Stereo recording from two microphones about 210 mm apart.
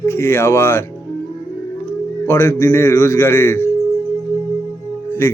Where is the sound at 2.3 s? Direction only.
15° left (ahead or behind).